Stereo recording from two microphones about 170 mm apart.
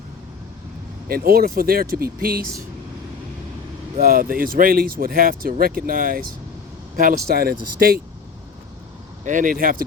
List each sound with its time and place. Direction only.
1.0 s speech: 60° right (ahead or behind)
4.0 s speech: 60° right (ahead or behind)
9.2 s speech: 50° right (ahead or behind)